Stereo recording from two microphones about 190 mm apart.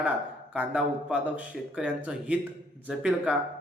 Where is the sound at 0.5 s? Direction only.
5° right (ahead or behind).